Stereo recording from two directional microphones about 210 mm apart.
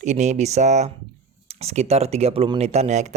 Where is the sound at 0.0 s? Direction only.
35° right (ahead or behind).